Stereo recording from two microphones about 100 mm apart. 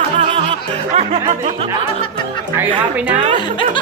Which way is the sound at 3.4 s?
55° left (ahead or behind).